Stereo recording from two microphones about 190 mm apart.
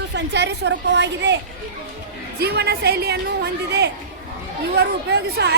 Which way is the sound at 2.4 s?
60° right (ahead or behind).